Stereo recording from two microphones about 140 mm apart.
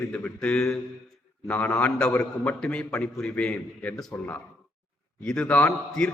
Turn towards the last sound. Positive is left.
turn(degrees=10)  # may be behind; listen again after turning